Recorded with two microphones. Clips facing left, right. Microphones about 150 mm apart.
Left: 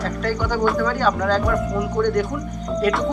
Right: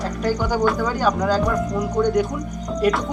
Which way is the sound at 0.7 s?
15° right (ahead or behind).